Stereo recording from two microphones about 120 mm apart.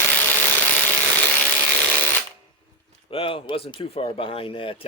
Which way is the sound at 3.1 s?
50° left (ahead or behind).